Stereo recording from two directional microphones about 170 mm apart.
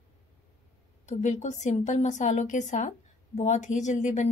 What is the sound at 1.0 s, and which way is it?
A woman's voice, 45° left (ahead or behind).